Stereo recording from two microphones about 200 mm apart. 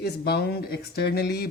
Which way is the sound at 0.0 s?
55° left (ahead or behind).